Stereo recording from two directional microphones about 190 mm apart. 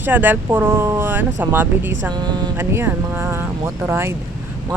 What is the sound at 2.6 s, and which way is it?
Speech, 10° right (ahead or behind).